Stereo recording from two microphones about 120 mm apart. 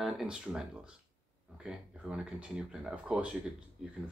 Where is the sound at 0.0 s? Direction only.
5° right (ahead or behind).